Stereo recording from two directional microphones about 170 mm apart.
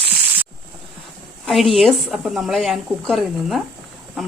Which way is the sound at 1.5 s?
Centre (ahead or behind).